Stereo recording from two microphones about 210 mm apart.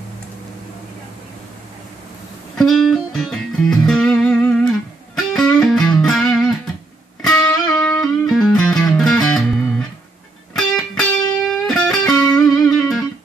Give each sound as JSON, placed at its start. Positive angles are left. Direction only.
{"t": 2.5, "sound": "music", "side_deg": 0}